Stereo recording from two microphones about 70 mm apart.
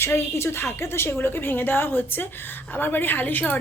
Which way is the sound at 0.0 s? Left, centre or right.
Left.